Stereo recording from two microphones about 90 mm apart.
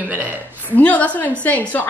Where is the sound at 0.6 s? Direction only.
20° left (ahead or behind).